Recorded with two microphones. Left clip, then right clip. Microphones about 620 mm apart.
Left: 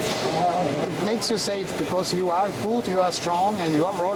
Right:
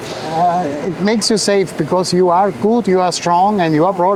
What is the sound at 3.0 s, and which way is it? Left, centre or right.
Speech, right.